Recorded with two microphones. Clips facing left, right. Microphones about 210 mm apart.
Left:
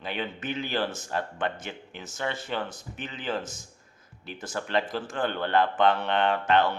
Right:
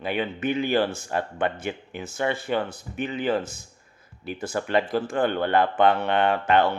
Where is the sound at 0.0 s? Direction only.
10° right (ahead or behind).